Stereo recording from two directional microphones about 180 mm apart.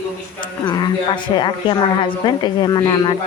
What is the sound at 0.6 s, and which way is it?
Speech, 25° left (ahead or behind).